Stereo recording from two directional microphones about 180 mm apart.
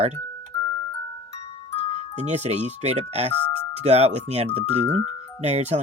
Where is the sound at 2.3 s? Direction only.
40° right (ahead or behind).